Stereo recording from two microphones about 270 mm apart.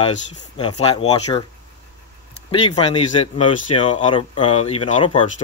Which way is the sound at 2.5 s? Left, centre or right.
Centre.